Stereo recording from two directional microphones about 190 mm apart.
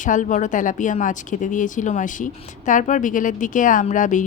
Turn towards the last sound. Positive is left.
turn(degrees=40)  # may be behind; listen again after turning